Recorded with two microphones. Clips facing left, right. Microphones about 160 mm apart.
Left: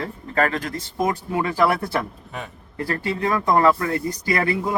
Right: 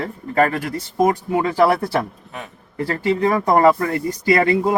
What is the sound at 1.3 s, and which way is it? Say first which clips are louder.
Speech: right 3 dB; 25° right (ahead or behind).